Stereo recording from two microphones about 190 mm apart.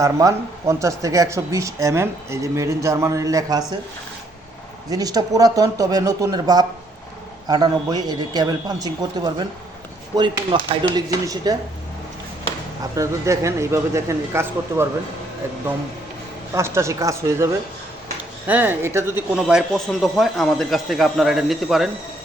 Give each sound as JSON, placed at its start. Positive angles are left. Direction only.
{"t": 0.0, "sound": "speech", "side_deg": -15}
{"t": 4.9, "sound": "speech", "side_deg": -20}
{"t": 12.8, "sound": "speech", "side_deg": -15}
{"t": 16.6, "sound": "speech", "side_deg": -15}